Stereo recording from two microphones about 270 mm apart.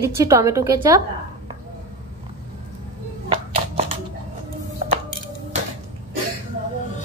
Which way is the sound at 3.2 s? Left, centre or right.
Right.